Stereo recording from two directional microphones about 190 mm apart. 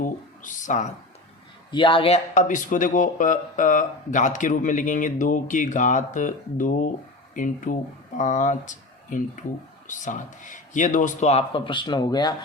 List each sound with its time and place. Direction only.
0.0 s speech: 40° left (ahead or behind)
1.7 s speech: 25° left (ahead or behind)